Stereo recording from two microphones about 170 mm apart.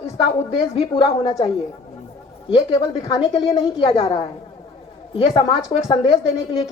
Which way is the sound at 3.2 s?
30° left (ahead or behind).